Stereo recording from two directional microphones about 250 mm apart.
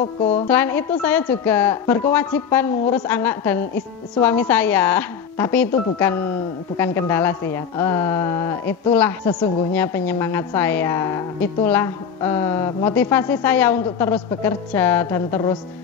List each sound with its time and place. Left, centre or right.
0.2 s speech: left
0.5 s a woman's voice: centre